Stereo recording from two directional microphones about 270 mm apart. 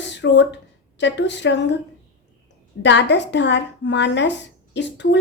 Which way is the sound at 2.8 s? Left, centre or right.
Left.